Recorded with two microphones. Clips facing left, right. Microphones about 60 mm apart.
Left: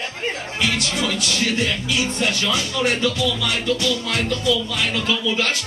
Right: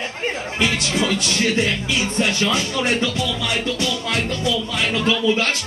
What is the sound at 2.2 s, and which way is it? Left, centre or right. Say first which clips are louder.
Speech: right 4 dB; right.